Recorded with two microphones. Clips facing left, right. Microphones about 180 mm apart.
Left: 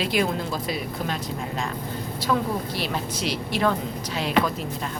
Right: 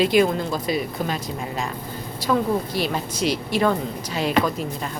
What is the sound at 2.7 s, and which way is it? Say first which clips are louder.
A woman's voice: right 3 dB; centre (ahead or behind).